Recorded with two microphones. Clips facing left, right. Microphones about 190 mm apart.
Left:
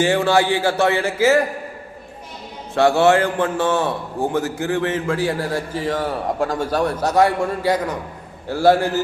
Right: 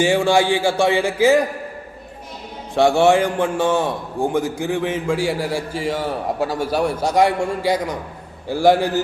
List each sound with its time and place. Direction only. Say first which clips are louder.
0.0 s a man's voice: right 1 dB; 15° right (ahead or behind)
2.7 s a man's voice: even; 15° right (ahead or behind)